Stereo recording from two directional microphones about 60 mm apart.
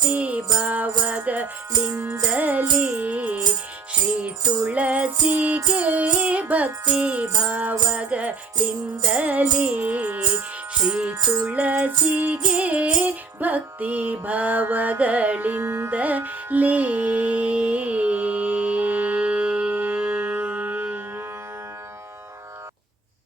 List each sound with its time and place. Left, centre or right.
0.1 s music: right